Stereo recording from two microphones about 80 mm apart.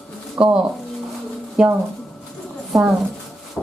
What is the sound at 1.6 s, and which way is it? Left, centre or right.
Speech, centre.